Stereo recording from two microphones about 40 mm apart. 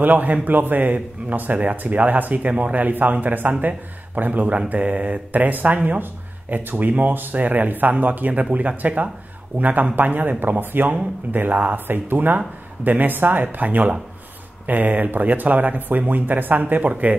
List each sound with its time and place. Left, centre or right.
0.0 s speech: right
10.4 s speech: right